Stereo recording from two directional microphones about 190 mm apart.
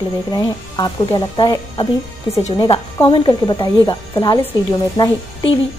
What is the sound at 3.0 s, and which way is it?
A woman's voice, 25° left (ahead or behind).